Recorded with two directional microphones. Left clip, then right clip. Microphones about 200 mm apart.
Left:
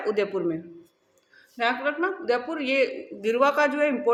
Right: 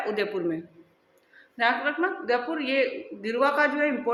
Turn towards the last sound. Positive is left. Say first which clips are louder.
# left 1 dB
turn(degrees=25)  # may be behind; listen again after turning